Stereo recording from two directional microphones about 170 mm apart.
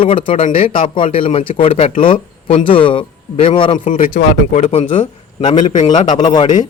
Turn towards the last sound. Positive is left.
turn(degrees=25)  # may be behind; listen again after turning